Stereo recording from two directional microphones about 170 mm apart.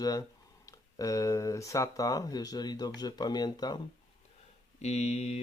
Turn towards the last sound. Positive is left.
turn(degrees=40)  # may be behind; listen again after turning